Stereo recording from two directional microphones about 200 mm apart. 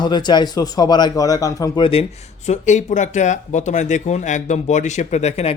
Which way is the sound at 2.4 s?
35° left (ahead or behind).